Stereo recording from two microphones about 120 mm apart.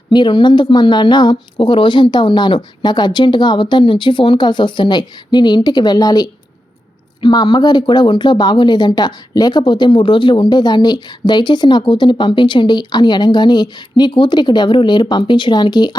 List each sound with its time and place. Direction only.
0.1 s speech: 40° left (ahead or behind)